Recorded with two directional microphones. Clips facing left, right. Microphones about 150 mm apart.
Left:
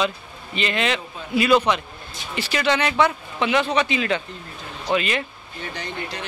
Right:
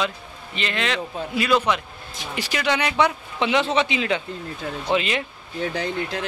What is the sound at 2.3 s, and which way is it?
Speech, 10° right (ahead or behind).